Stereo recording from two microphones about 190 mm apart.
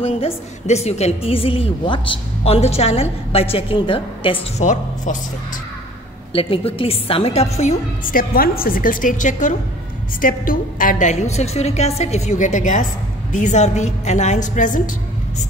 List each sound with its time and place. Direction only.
0.0 s a woman's voice: 30° left (ahead or behind)
4.6 s a woman's voice: 40° left (ahead or behind)
6.3 s a woman's voice: 30° left (ahead or behind)
7.5 s a woman's voice: 40° left (ahead or behind)